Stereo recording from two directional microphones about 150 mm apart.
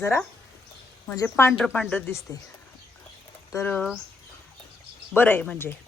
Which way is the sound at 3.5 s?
10° left (ahead or behind).